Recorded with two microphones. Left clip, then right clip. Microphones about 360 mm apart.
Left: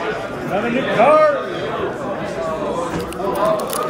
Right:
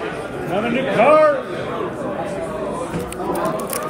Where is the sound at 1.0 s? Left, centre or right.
Right.